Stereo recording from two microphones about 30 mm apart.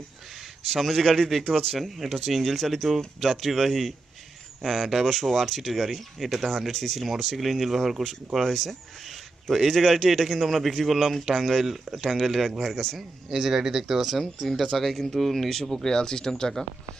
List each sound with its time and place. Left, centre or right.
0.7 s speech: centre
1.3 s a man's voice: centre
12.2 s speech: centre
13.3 s speech: centre
14.1 s speech: centre